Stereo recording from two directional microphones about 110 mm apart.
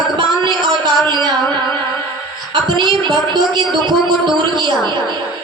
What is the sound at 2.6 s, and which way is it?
A woman's voice, 45° right (ahead or behind).